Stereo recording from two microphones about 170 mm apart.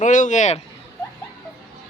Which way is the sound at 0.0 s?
45° left (ahead or behind).